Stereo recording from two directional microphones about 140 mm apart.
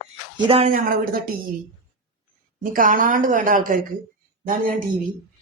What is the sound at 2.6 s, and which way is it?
A woman's voice, 75° right (ahead or behind).